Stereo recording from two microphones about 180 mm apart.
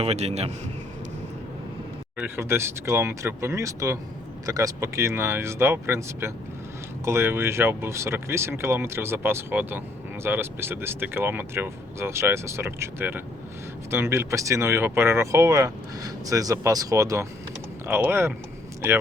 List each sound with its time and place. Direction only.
0.0 s a man's voice: 35° right (ahead or behind)
2.1 s speech: 10° right (ahead or behind)